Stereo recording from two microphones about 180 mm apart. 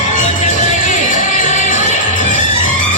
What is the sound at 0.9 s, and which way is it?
Music, 45° left (ahead or behind).